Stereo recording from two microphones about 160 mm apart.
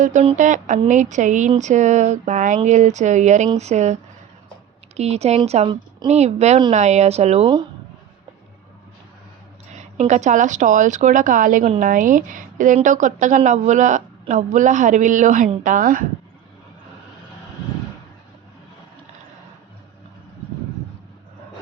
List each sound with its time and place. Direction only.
0.0 s a woman's voice: 50° right (ahead or behind)
4.9 s a woman's voice: 40° right (ahead or behind)
9.7 s a woman's voice: 45° right (ahead or behind)